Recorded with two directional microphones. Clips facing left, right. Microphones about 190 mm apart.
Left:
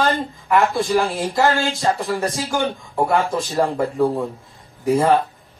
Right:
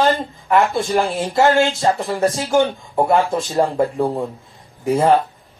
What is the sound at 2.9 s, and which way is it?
Speech, 20° right (ahead or behind).